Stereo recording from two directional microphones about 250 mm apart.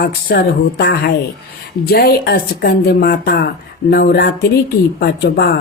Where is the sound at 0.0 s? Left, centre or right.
Left.